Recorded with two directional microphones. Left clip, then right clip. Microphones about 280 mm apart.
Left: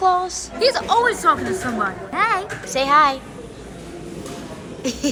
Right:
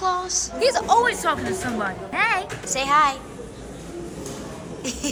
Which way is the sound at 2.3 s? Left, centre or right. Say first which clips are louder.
Left 2 dB; centre.